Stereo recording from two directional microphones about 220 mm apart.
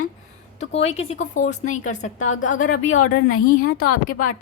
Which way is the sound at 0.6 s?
30° left (ahead or behind).